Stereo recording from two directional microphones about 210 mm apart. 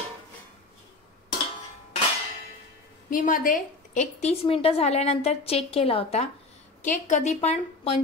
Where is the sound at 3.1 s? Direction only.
40° left (ahead or behind).